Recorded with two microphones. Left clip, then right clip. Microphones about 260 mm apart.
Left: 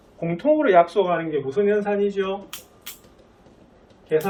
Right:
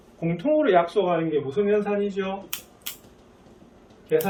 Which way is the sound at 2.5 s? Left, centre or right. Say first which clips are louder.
Right 3 dB; right.